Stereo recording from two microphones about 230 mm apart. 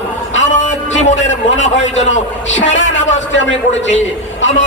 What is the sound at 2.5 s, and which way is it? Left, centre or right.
A man's voice, left.